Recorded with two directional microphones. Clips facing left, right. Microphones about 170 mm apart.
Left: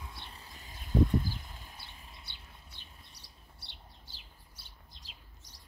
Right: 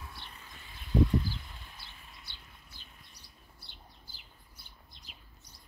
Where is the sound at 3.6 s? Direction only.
90° left.